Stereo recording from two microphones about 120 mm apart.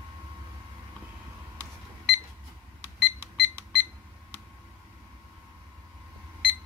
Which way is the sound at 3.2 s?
20° right (ahead or behind).